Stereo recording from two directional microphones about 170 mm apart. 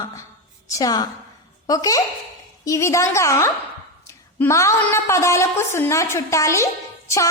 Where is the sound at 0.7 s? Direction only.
20° left (ahead or behind).